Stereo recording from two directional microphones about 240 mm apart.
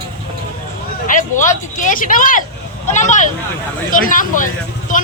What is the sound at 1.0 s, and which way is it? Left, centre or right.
Speech, left.